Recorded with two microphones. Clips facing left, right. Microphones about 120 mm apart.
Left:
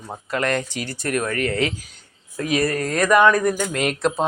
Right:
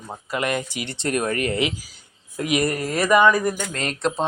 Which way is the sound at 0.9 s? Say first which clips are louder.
Right 1 dB; 25° right (ahead or behind).